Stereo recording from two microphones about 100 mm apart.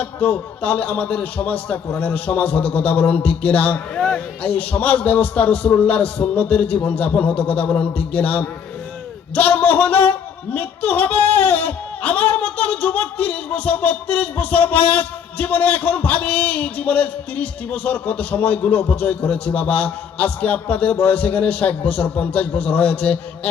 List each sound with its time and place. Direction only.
0.0 s speech: 15° left (ahead or behind)